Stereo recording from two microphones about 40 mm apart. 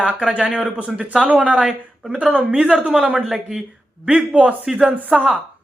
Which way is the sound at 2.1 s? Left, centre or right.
Right.